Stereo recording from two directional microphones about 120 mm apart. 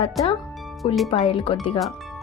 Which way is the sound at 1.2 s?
50° left (ahead or behind).